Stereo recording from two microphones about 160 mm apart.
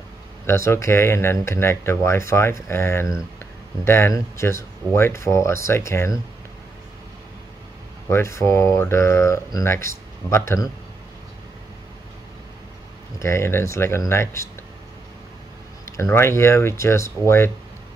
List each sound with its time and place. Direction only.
0.5 s speech: 15° left (ahead or behind)
8.1 s speech: 15° left (ahead or behind)
13.2 s speech: 15° left (ahead or behind)
16.0 s speech: 15° left (ahead or behind)